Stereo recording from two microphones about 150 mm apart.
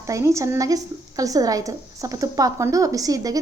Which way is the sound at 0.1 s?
20° right (ahead or behind).